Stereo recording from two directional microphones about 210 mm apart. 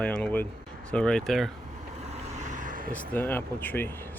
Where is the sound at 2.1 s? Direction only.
30° right (ahead or behind).